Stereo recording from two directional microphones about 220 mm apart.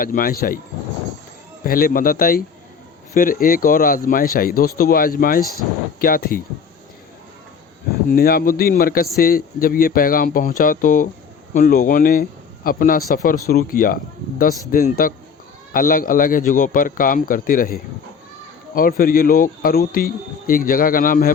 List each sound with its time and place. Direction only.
0.0 s speech: 40° left (ahead or behind)
1.6 s speech: 40° left (ahead or behind)
8.1 s a man's voice: 45° left (ahead or behind)